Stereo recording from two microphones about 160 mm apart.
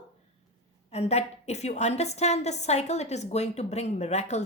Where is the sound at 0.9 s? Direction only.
40° left (ahead or behind).